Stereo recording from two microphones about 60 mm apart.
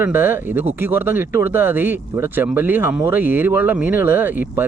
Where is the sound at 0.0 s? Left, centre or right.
Right.